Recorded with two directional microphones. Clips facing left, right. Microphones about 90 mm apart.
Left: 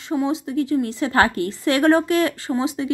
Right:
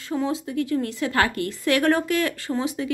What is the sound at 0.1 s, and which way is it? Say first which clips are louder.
Speech: left 3 dB; 15° left (ahead or behind).